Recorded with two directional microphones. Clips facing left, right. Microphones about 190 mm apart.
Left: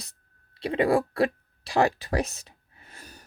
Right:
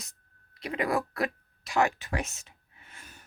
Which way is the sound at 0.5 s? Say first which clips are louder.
Left 6 dB; 30° left (ahead or behind).